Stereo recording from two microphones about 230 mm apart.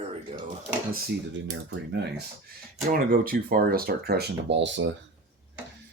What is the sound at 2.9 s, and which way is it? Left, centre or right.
Speech, right.